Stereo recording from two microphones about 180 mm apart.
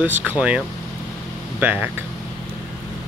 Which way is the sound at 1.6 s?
10° right (ahead or behind).